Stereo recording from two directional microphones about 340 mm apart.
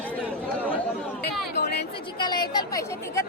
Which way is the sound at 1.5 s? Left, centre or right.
Left.